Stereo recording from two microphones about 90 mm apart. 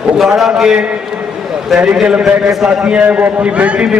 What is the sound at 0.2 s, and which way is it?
A man's voice, 5° right (ahead or behind).